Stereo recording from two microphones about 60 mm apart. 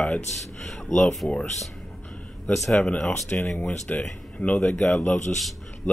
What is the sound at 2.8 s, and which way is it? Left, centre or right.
Speech, centre.